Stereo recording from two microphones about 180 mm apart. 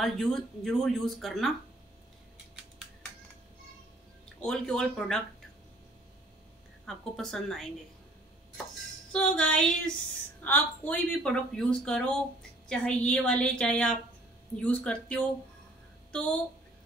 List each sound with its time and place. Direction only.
0.0 s speech: centre (ahead or behind)
4.4 s speech: 5° left (ahead or behind)
6.9 s speech: 5° left (ahead or behind)
9.1 s speech: 5° left (ahead or behind)